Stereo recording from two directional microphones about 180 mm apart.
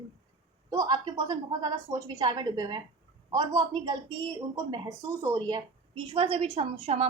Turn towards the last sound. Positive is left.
turn(degrees=-35)  # may be behind; listen again after turning